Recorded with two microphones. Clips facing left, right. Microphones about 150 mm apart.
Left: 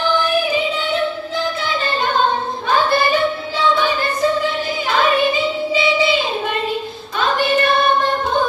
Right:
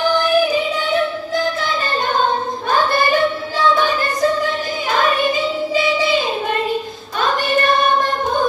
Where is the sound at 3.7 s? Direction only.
45° right (ahead or behind).